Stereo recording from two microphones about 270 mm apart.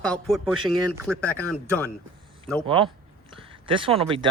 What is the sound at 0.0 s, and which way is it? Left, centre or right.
Speech, centre.